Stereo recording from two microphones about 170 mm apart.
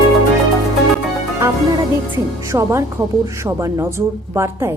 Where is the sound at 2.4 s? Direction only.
20° right (ahead or behind).